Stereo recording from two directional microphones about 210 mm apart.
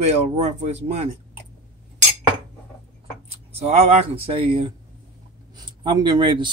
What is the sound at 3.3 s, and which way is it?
Speech, 30° right (ahead or behind).